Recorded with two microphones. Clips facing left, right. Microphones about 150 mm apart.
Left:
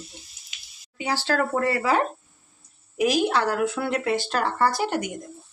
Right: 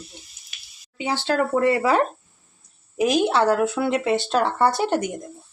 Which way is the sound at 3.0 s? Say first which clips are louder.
Right 3 dB; 25° right (ahead or behind).